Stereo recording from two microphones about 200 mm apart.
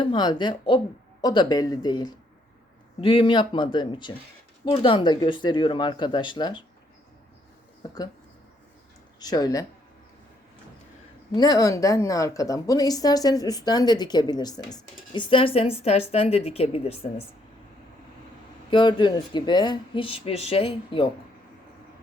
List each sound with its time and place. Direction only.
0.0 s speech: 20° left (ahead or behind)
7.8 s speech: 20° left (ahead or behind)
9.2 s speech: 20° left (ahead or behind)
11.3 s a woman's voice: 20° left (ahead or behind)
18.7 s speech: 25° left (ahead or behind)